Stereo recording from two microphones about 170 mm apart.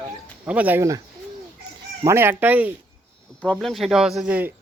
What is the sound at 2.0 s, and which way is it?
Speech, 15° right (ahead or behind).